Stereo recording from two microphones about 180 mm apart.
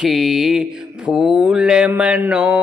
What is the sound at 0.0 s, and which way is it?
Mantra, centre (ahead or behind).